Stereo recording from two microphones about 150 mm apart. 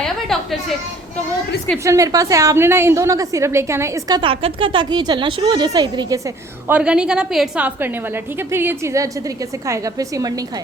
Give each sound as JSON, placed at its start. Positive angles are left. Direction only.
{"t": 1.8, "sound": "a woman's voice", "side_deg": -20}
{"t": 4.2, "sound": "a woman's voice", "side_deg": -35}
{"t": 6.7, "sound": "a woman's voice", "side_deg": -10}